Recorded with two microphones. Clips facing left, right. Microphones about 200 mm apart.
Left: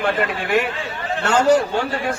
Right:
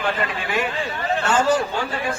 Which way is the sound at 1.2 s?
65° left (ahead or behind).